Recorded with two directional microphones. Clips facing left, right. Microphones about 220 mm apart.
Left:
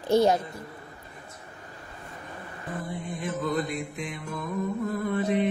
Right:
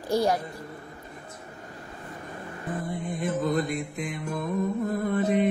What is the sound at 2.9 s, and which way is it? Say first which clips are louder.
Mantra: right 4 dB; 50° right (ahead or behind).